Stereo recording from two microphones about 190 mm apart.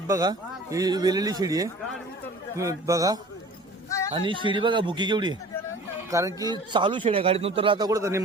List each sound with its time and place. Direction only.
0.1 s a man's voice: 20° right (ahead or behind)
3.8 s a sound: 15° left (ahead or behind)
4.1 s a man's voice: 25° right (ahead or behind)